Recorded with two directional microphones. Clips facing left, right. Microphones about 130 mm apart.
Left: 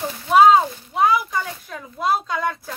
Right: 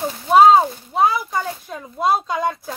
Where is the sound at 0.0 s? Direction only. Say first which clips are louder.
Right 2 dB; 30° right (ahead or behind).